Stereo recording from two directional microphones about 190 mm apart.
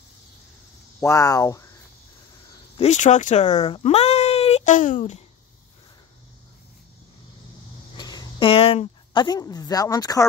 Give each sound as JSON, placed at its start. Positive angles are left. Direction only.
{"t": 1.0, "sound": "speech", "side_deg": 15}
{"t": 2.8, "sound": "speech", "side_deg": 40}
{"t": 8.0, "sound": "speech", "side_deg": 20}